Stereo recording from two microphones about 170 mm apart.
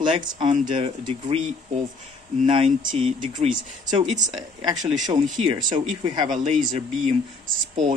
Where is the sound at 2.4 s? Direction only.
30° right (ahead or behind).